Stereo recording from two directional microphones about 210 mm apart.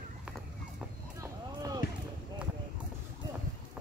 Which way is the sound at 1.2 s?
15° right (ahead or behind).